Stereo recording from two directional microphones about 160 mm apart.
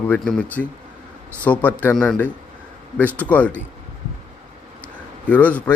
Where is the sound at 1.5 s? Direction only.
10° left (ahead or behind).